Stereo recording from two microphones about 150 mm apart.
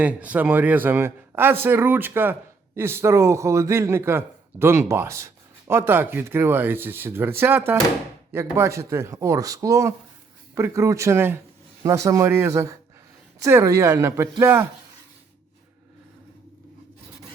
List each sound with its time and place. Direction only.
0.0 s speech: 10° right (ahead or behind)